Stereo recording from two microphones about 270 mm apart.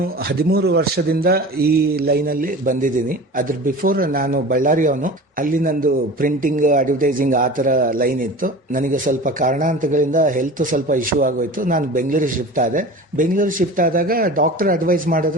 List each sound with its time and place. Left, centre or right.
0.3 s a man's voice: right